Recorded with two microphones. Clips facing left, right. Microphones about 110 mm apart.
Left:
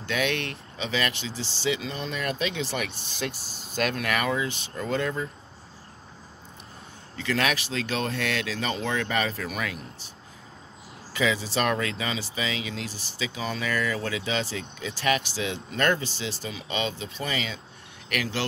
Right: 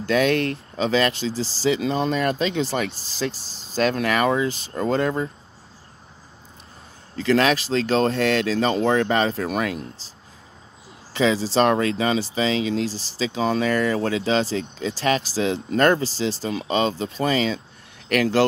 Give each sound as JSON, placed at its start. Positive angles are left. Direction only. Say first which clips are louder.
{"t": 0.0, "sound": "speech", "louder": "right 8 dB", "side_deg": -40}
{"t": 7.2, "sound": "speech", "louder": "right 8 dB", "side_deg": -35}
{"t": 11.1, "sound": "speech", "louder": "right 7 dB", "side_deg": -30}